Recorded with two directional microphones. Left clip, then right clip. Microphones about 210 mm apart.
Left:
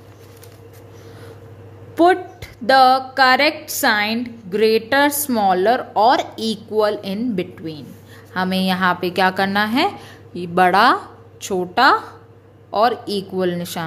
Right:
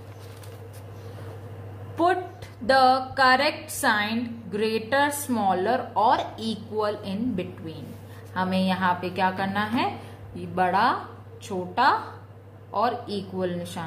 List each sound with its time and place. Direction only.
2.0 s a woman's voice: 35° left (ahead or behind)